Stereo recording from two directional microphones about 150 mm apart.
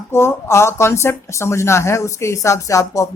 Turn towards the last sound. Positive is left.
turn(degrees=20)  # may be behind; listen again after turning